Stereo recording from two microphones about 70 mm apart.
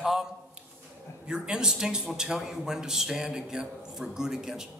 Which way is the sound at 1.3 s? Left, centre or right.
Centre.